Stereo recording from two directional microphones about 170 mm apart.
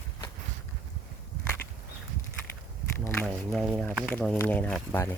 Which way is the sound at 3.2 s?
Centre (ahead or behind).